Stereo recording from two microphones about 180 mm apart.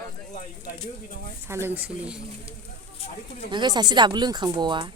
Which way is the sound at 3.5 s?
25° right (ahead or behind).